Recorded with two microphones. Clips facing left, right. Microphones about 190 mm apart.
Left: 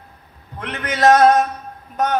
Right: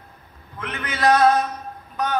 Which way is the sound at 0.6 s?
40° left (ahead or behind).